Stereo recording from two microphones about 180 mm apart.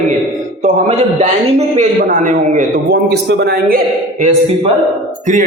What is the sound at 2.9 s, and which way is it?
Speech, 65° right (ahead or behind).